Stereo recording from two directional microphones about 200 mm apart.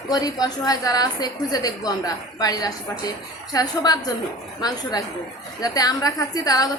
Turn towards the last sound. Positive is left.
turn(degrees=20)  # may be behind; listen again after turning